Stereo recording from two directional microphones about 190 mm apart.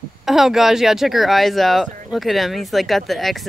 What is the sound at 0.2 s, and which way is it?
Speech, centre (ahead or behind).